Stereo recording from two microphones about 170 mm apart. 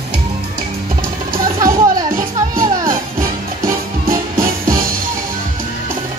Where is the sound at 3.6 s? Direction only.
55° right (ahead or behind).